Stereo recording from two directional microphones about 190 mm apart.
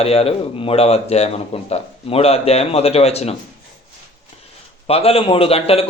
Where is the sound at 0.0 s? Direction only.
30° left (ahead or behind).